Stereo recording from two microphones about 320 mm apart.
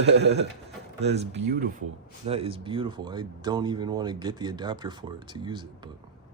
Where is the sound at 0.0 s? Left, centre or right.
Right; by 5.9 s centre.